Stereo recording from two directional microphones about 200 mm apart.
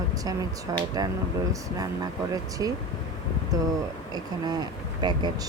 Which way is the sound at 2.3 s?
15° right (ahead or behind).